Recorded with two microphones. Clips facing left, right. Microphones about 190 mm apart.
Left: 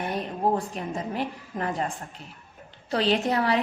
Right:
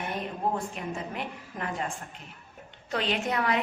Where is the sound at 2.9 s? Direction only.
35° left (ahead or behind).